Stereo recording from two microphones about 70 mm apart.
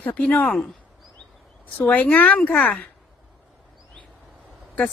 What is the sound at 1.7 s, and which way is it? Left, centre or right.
Speech, left.